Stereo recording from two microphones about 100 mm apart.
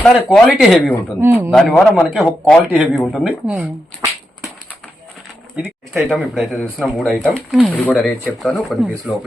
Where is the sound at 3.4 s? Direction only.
15° right (ahead or behind).